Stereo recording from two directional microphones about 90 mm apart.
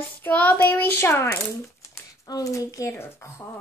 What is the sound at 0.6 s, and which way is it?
A child's voice, 25° left (ahead or behind).